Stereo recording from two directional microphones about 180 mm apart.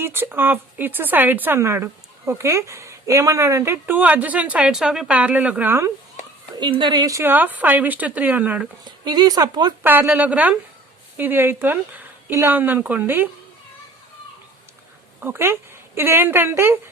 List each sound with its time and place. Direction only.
0.0 s speech: 10° right (ahead or behind)
6.6 s speech: 25° right (ahead or behind); by 8.6 s 10° right (ahead or behind)
9.0 s a woman's voice: 20° right (ahead or behind)
9.8 s speech: 10° right (ahead or behind)
15.2 s speech: 10° right (ahead or behind)